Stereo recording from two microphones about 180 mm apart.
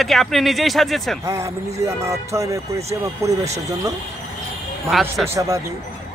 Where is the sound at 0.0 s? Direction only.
Centre (ahead or behind).